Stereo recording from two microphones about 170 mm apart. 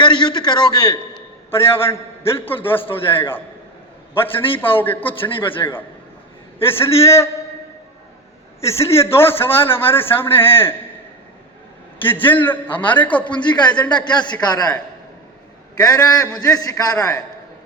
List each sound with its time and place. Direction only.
0.0 s a man's voice: 30° left (ahead or behind)
1.5 s a man's voice: 15° left (ahead or behind)
4.5 s a man's voice: 10° left (ahead or behind)
5.4 s a man's voice: 30° left (ahead or behind)
6.6 s a man's voice: 15° left (ahead or behind)
8.6 s a man's voice: 15° left (ahead or behind)
11.9 s a man's voice: 10° left (ahead or behind)
13.9 s a man's voice: 25° left (ahead or behind)
15.8 s a man's voice: 20° left (ahead or behind)